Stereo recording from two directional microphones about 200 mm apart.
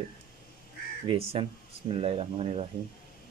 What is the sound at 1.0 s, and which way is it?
A man's voice, 25° right (ahead or behind).